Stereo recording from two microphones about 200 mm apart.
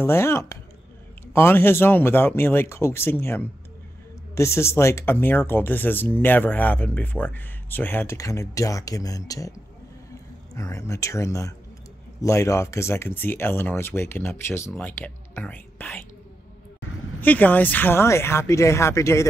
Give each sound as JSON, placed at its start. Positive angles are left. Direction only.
{"t": 0.0, "sound": "speech", "side_deg": 10}
{"t": 10.5, "sound": "speech", "side_deg": 15}
{"t": 17.2, "sound": "speech", "side_deg": 10}